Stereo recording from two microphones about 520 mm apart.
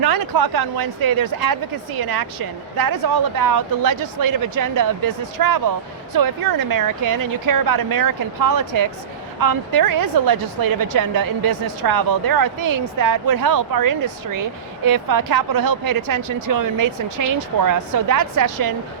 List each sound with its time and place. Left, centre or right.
0.0 s a woman's voice: right